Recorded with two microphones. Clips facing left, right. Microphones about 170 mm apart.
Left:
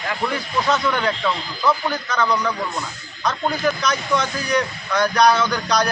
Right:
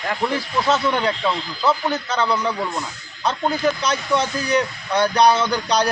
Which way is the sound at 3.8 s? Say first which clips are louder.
Right 1 dB; 30° right (ahead or behind).